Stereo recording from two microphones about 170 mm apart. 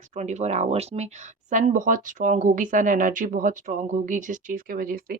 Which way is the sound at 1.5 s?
50° right (ahead or behind).